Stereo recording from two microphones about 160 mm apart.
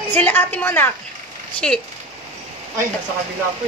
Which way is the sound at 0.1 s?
10° left (ahead or behind).